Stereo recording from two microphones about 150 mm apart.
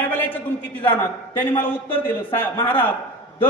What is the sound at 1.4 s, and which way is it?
A man's voice, 15° left (ahead or behind).